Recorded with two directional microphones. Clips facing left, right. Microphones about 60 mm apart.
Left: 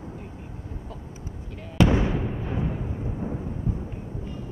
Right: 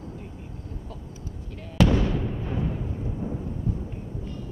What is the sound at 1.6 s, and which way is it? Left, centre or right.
Fireworks, left.